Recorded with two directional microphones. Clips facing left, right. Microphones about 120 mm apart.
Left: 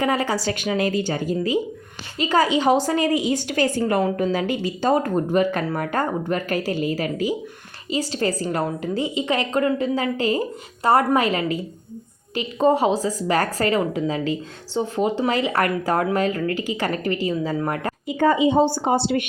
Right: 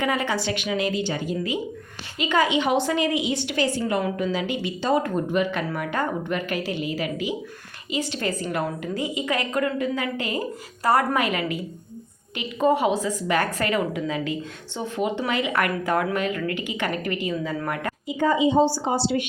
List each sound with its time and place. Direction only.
0.0 s a woman's voice: 35° left (ahead or behind)
18.2 s a woman's voice: 55° left (ahead or behind)